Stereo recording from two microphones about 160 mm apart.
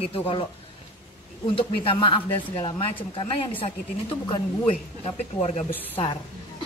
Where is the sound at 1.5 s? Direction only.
35° left (ahead or behind).